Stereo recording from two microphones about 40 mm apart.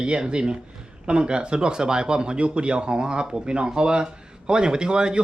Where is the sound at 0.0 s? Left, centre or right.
Right.